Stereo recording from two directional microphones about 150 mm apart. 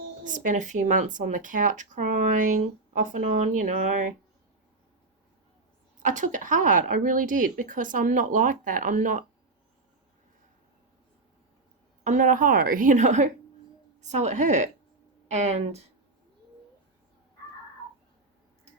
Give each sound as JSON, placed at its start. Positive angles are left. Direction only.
{"t": 0.3, "sound": "speech", "side_deg": -60}
{"t": 6.0, "sound": "speech", "side_deg": -55}
{"t": 12.0, "sound": "a woman's voice", "side_deg": -60}